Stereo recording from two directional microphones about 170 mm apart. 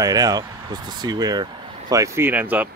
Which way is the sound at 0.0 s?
20° right (ahead or behind).